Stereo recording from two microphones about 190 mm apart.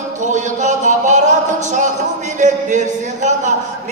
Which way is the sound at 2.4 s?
40° right (ahead or behind).